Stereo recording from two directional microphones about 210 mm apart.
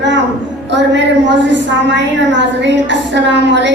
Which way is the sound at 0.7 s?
55° right (ahead or behind).